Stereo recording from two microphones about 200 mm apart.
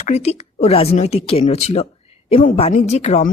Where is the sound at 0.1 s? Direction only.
30° left (ahead or behind).